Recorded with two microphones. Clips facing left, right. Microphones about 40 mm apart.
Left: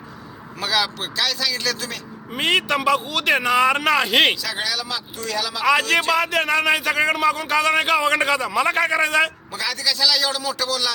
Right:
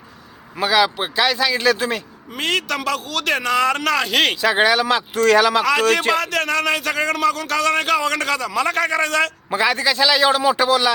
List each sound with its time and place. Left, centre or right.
0.6 s speech: centre
2.3 s a man's voice: centre
4.4 s speech: right
6.1 s a man's voice: centre
9.5 s a man's voice: right